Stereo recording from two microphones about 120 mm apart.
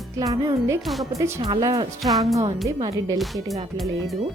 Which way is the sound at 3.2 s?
Centre (ahead or behind).